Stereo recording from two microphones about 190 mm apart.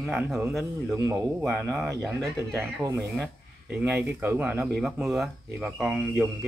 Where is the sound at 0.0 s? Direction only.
Centre (ahead or behind).